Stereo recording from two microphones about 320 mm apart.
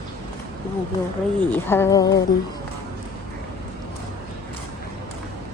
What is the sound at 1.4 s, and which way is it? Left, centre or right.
Speech, centre.